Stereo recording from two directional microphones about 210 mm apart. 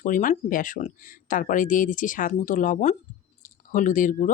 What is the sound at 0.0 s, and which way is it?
Speech, 40° left (ahead or behind).